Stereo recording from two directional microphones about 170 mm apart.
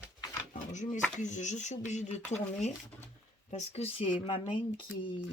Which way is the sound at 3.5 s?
40° left (ahead or behind).